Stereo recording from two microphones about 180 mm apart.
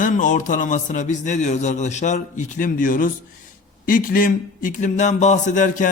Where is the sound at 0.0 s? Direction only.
45° left (ahead or behind).